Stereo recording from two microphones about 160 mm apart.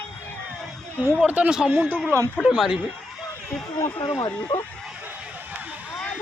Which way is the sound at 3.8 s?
25° left (ahead or behind).